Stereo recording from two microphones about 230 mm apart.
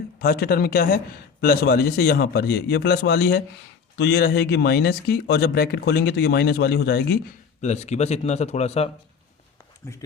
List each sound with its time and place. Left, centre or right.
0.2 s speech: left
7.6 s speech: left